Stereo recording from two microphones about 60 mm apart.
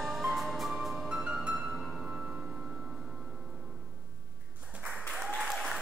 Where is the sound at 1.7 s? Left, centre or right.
Centre.